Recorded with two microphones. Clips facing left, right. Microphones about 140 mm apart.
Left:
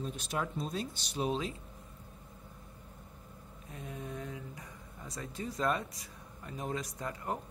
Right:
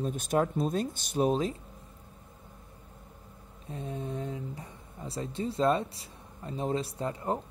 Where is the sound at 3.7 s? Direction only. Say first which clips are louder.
Right 6 dB; 30° right (ahead or behind).